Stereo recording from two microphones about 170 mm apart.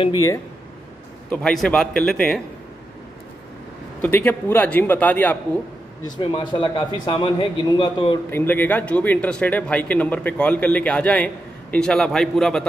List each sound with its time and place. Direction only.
0.0 s a man's voice: 20° left (ahead or behind)
1.3 s a man's voice: 5° left (ahead or behind)
4.0 s speech: 10° left (ahead or behind)
6.1 s a man's voice: 25° left (ahead or behind)
8.3 s speech: 15° left (ahead or behind)